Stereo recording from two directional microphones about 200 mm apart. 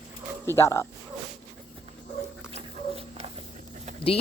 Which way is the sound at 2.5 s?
30° right (ahead or behind).